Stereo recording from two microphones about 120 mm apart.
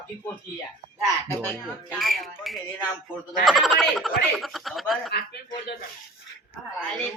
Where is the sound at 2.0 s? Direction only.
Centre (ahead or behind).